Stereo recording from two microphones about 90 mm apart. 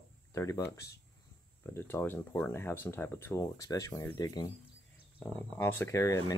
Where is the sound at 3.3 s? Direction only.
40° left (ahead or behind).